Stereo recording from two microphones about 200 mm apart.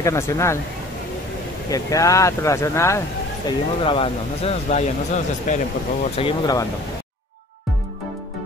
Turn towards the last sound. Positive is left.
turn(degrees=30)  # may be behind; listen again after turning